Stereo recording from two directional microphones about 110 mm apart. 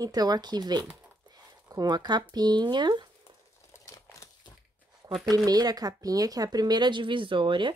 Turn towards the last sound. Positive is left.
turn(degrees=-50)  # may be behind; listen again after turning